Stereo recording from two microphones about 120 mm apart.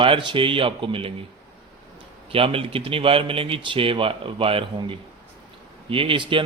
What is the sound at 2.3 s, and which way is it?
A man's voice, 50° right (ahead or behind).